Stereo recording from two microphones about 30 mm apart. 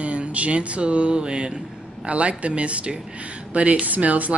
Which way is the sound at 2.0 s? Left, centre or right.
Right.